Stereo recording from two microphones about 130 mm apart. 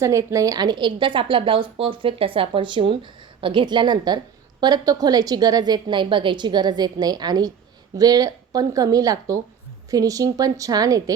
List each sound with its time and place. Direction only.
0.0 s a woman's voice: 25° right (ahead or behind)